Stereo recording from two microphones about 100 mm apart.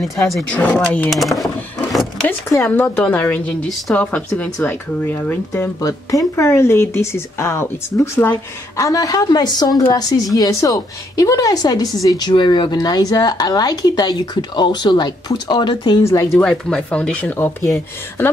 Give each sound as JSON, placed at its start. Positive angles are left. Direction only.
{"t": 0.0, "sound": "speech", "side_deg": 0}
{"t": 0.6, "sound": "speech", "side_deg": 15}
{"t": 1.1, "sound": "a sound", "side_deg": 0}
{"t": 3.0, "sound": "speech", "side_deg": 15}
{"t": 5.8, "sound": "speech", "side_deg": 35}
{"t": 8.7, "sound": "a woman's voice", "side_deg": 35}
{"t": 16.0, "sound": "speech", "side_deg": 30}
{"t": 16.3, "sound": "speech", "side_deg": 5}